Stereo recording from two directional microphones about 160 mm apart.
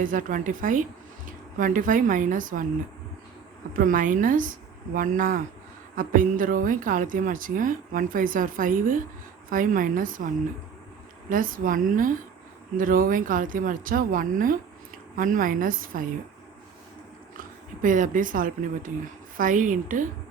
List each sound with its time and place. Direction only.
0.0 s a woman's voice: 55° right (ahead or behind)
3.8 s a woman's voice: 55° right (ahead or behind)
11.3 s a woman's voice: 60° right (ahead or behind)
17.8 s a woman's voice: 55° right (ahead or behind)